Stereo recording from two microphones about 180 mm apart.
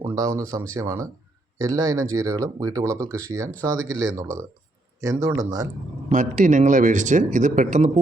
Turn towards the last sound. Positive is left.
turn(degrees=-45)  # may be behind; listen again after turning